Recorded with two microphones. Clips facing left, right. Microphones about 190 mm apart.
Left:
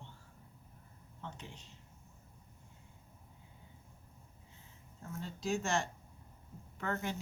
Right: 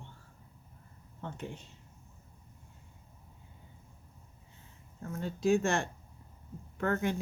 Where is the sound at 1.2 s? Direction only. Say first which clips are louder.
Right 7 dB; 55° right (ahead or behind).